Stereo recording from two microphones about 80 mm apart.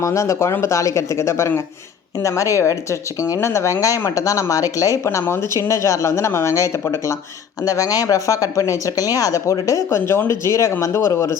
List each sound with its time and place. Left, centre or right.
0.0 s speech: left
5.2 s speech: left
7.6 s speech: left